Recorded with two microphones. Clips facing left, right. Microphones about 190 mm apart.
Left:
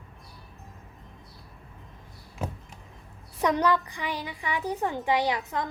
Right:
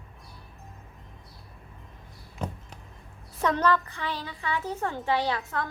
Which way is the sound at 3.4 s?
15° left (ahead or behind).